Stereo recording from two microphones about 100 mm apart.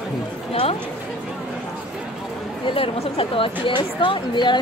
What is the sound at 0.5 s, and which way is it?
Chatter, 70° left (ahead or behind).